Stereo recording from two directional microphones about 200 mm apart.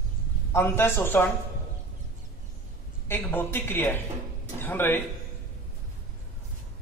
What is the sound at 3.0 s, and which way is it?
A man's voice, 10° left (ahead or behind).